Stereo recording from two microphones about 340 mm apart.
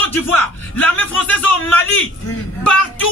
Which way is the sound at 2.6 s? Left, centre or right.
Centre.